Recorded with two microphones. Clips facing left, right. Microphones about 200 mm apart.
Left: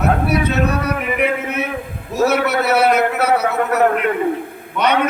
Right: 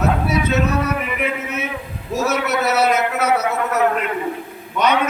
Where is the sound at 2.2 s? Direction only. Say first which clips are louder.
Left 4 dB; 60° left (ahead or behind).